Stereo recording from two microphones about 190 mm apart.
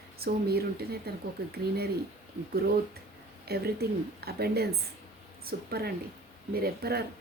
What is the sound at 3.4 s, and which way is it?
A woman's voice, 55° right (ahead or behind).